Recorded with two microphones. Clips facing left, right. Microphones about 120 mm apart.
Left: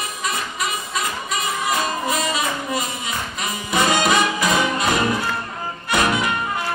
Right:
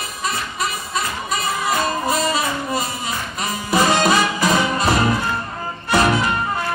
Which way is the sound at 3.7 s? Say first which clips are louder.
Right 2 dB; 35° right (ahead or behind).